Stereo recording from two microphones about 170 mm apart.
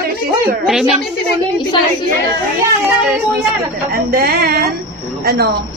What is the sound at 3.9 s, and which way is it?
Speech, 60° right (ahead or behind).